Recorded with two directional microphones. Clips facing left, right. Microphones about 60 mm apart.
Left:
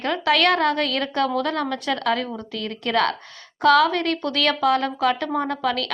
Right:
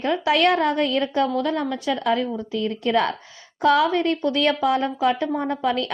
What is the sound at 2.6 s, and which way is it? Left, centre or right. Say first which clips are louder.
Speech: right 5 dB; left.